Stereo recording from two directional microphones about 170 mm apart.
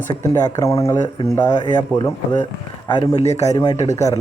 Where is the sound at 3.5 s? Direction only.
25° left (ahead or behind).